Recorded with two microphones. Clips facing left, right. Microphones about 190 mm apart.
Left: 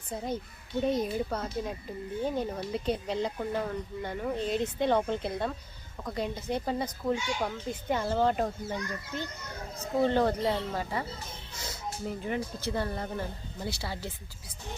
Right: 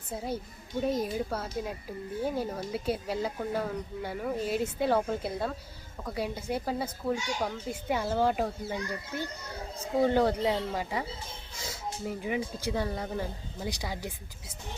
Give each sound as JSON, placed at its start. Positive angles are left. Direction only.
{"t": 0.1, "sound": "speech", "side_deg": -5}